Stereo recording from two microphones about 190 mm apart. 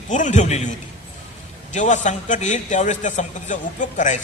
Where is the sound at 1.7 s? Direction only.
40° left (ahead or behind).